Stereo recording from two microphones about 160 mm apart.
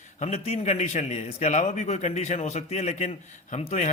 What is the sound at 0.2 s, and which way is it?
Speech, 40° left (ahead or behind).